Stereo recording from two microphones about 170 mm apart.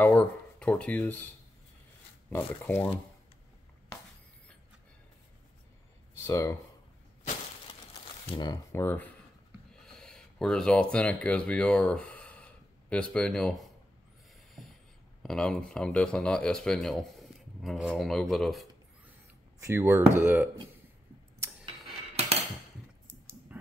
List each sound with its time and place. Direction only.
0.0 s speech: 10° left (ahead or behind)
2.3 s speech: 10° left (ahead or behind)
6.2 s speech: 15° left (ahead or behind)
8.3 s speech: 25° left (ahead or behind); by 13.7 s centre (ahead or behind)
14.6 s writing: centre (ahead or behind)
15.2 s speech: 5° left (ahead or behind)
19.6 s speech: 15° right (ahead or behind)
23.5 s a sound: 10° right (ahead or behind)